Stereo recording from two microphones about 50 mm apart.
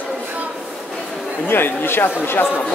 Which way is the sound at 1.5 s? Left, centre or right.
Left.